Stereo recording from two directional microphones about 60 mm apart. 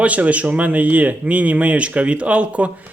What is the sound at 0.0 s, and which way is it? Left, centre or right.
Speech, right.